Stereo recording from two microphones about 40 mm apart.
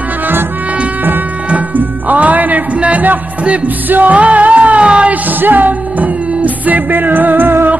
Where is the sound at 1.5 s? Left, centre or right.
Right.